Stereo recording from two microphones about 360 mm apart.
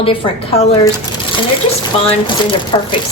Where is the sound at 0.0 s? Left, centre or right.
Centre.